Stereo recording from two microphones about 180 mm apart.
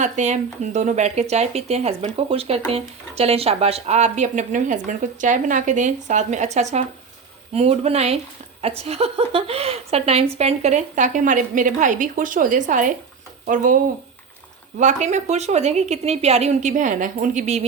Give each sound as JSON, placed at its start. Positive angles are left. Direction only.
{"t": 0.0, "sound": "a woman's voice", "side_deg": -40}
{"t": 14.8, "sound": "speech", "side_deg": -40}